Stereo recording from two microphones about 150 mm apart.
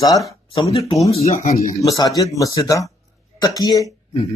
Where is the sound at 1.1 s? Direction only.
45° left (ahead or behind).